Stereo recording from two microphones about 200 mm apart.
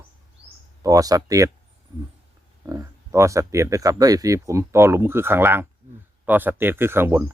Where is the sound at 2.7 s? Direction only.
15° right (ahead or behind).